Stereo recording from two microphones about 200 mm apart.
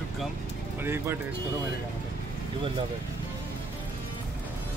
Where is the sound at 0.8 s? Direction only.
10° right (ahead or behind).